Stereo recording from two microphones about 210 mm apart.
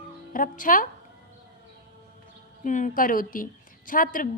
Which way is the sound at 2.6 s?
35° left (ahead or behind).